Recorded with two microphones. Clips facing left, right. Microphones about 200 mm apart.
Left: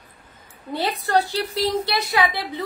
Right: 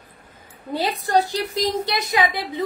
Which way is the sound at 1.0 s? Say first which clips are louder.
Right 1 dB; 15° right (ahead or behind).